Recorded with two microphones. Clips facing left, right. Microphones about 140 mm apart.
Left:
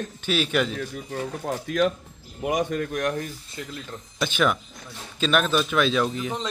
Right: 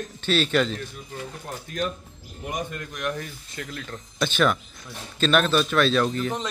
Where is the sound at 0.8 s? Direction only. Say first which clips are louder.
Left 5 dB; 90° left; by 3.0 s 75° left (ahead or behind).